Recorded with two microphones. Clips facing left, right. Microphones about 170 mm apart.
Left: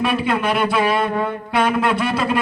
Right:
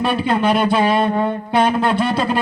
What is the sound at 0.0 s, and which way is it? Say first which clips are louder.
Speech: right 2 dB; 30° right (ahead or behind).